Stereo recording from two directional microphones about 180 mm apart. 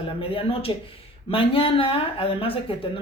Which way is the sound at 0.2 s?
30° left (ahead or behind).